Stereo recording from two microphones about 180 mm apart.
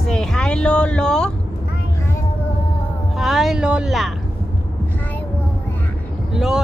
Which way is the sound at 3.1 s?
Centre (ahead or behind).